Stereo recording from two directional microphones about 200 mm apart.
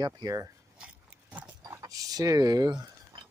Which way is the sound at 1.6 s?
15° right (ahead or behind).